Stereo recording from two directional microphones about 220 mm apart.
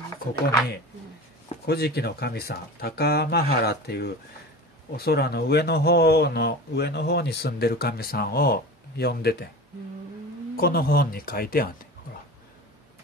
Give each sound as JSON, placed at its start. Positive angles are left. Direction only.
{"t": 1.7, "sound": "speech", "side_deg": 45}
{"t": 10.5, "sound": "speech", "side_deg": 45}